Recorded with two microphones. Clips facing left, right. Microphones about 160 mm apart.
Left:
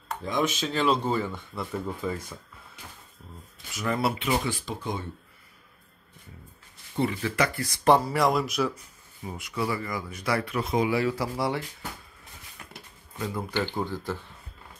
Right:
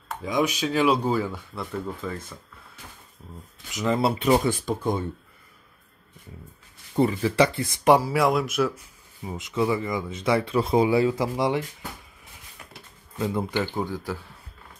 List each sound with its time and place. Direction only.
0.1 s speech: 10° right (ahead or behind)
2.0 s speech: 10° left (ahead or behind)
3.7 s speech: 20° right (ahead or behind)
4.2 s speech: 45° right (ahead or behind)
7.0 s speech: 35° right (ahead or behind)
7.4 s speech: 20° right (ahead or behind); by 8.8 s centre (ahead or behind)
9.2 s speech: 20° right (ahead or behind)
13.2 s speech: 20° right (ahead or behind)